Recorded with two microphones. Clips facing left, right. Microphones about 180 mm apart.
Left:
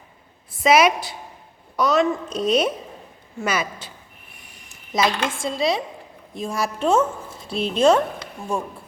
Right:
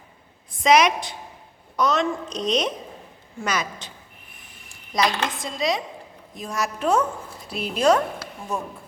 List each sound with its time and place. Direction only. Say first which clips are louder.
0.5 s a woman's voice: left 1 dB; 5° left (ahead or behind)
5.0 s dishes: left 4 dB; 25° left (ahead or behind)